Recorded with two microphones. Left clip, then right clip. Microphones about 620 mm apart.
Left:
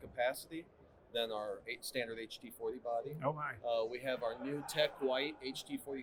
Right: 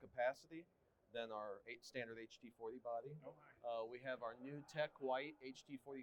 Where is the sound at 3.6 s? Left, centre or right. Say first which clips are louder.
Left 9 dB; right.